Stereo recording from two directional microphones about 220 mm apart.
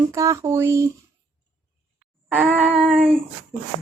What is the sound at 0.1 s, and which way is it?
Speech, 15° right (ahead or behind).